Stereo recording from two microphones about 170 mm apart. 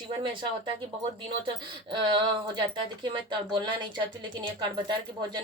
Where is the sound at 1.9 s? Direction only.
30° right (ahead or behind).